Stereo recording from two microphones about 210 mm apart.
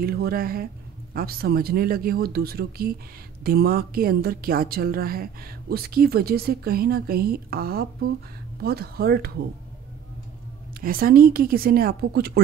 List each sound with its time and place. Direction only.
0.0 s a woman's voice: 45° right (ahead or behind)
10.8 s a woman's voice: 45° right (ahead or behind)